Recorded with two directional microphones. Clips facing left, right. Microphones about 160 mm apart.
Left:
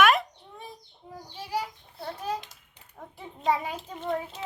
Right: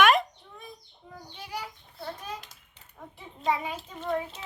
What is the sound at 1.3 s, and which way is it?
Child singing, 30° left (ahead or behind).